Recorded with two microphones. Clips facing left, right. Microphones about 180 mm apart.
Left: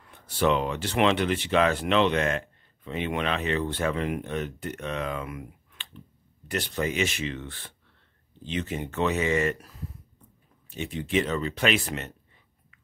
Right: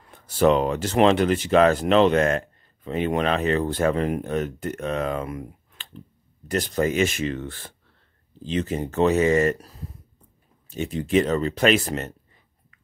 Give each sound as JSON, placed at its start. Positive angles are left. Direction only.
{"t": 0.4, "sound": "speech", "side_deg": -45}